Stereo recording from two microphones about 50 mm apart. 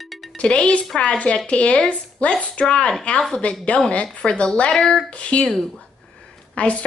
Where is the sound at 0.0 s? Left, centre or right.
Centre.